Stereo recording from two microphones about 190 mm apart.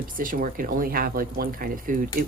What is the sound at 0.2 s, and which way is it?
Speech, 45° right (ahead or behind).